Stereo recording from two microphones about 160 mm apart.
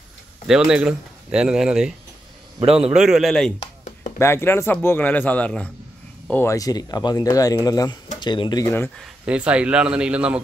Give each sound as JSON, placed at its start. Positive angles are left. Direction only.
{"t": 0.5, "sound": "speech", "side_deg": -5}
{"t": 2.6, "sound": "a man's voice", "side_deg": -40}
{"t": 2.9, "sound": "speech", "side_deg": -5}
{"t": 3.5, "sound": "chopping", "side_deg": 45}
{"t": 4.2, "sound": "speech", "side_deg": 15}
{"t": 6.4, "sound": "speech", "side_deg": 20}
{"t": 9.0, "sound": "a man's voice", "side_deg": -5}